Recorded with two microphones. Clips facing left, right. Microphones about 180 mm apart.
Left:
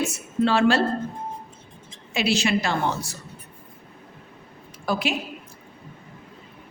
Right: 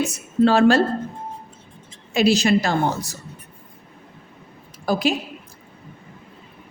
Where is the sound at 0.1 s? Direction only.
40° right (ahead or behind).